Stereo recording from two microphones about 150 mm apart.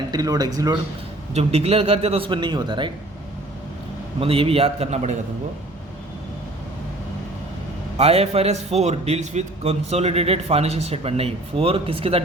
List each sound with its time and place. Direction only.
0.1 s speech: 25° right (ahead or behind)
1.3 s a man's voice: 45° right (ahead or behind)
4.2 s a man's voice: 40° right (ahead or behind)
7.9 s a man's voice: 45° right (ahead or behind)